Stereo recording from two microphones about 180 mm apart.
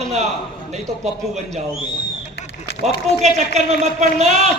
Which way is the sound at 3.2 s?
40° right (ahead or behind).